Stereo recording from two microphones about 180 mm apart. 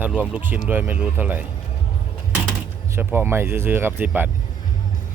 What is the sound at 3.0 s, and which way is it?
Speech, 10° right (ahead or behind).